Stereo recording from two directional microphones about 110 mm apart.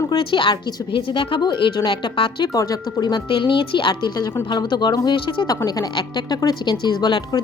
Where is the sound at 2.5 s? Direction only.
30° left (ahead or behind).